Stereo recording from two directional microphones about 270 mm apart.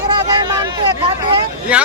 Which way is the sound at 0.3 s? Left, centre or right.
Centre.